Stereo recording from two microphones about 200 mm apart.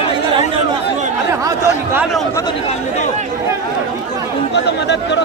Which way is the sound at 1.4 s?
15° right (ahead or behind).